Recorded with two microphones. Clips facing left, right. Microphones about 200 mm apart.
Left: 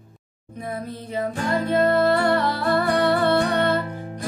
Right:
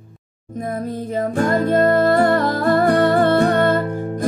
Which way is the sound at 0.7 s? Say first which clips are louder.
Right 5 dB; 45° right (ahead or behind).